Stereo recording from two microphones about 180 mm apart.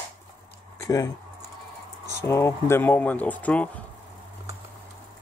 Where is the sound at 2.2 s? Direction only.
15° left (ahead or behind).